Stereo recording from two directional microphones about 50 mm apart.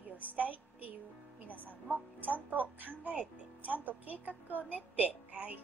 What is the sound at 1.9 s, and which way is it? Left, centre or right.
A woman's voice, right.